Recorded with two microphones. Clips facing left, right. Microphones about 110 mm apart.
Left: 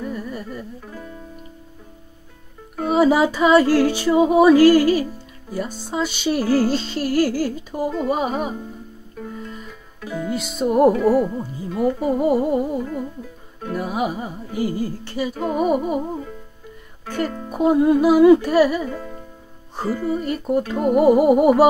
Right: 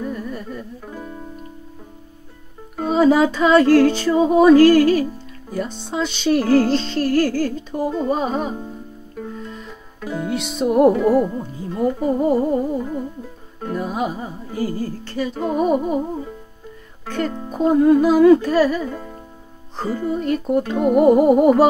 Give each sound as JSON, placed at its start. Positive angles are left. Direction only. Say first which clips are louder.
{"t": 0.0, "sound": "music", "louder": "right 1 dB", "side_deg": 5}
{"t": 2.9, "sound": "music", "louder": "right 1 dB", "side_deg": 10}
{"t": 10.2, "sound": "music", "louder": "right 1 dB", "side_deg": 0}
{"t": 14.6, "sound": "music", "louder": "left 1 dB", "side_deg": -40}
{"t": 15.0, "sound": "music", "louder": "right 3 dB", "side_deg": 10}
{"t": 17.5, "sound": "music", "louder": "right 2 dB", "side_deg": 10}
{"t": 18.9, "sound": "music", "louder": "even", "side_deg": -15}
{"t": 20.1, "sound": "music", "louder": "right 4 dB", "side_deg": 5}